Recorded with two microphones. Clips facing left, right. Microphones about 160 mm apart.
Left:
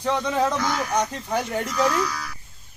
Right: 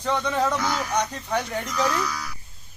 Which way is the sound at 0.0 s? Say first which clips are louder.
Left 1 dB; 5° left (ahead or behind).